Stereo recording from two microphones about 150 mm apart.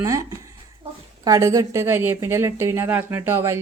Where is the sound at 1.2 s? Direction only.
25° right (ahead or behind).